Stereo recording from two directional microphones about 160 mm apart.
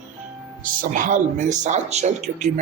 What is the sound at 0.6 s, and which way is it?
A woman's voice, 55° right (ahead or behind).